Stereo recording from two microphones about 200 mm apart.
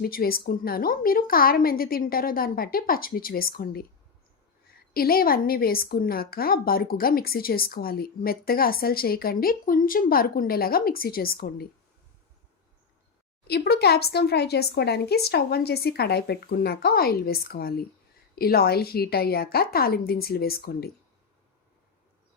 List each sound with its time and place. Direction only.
0.0 s a woman's voice: 45° left (ahead or behind)
4.9 s a woman's voice: 50° left (ahead or behind)
13.5 s a woman's voice: 55° left (ahead or behind)